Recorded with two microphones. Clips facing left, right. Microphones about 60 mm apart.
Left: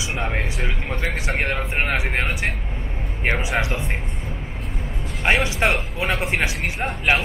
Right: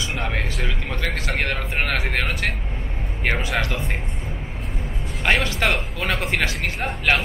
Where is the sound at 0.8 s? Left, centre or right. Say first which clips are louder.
Left 2 dB; centre.